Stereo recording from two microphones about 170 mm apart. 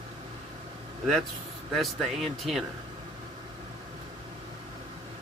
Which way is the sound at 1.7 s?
Centre (ahead or behind).